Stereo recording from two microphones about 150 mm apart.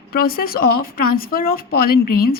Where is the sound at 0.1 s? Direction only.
85° left.